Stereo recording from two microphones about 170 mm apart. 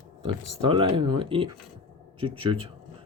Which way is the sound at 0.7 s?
30° right (ahead or behind).